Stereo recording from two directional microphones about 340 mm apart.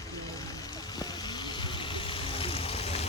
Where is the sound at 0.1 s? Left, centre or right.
Centre.